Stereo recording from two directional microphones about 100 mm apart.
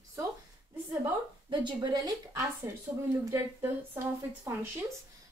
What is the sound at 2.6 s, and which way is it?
A woman's voice, 25° right (ahead or behind).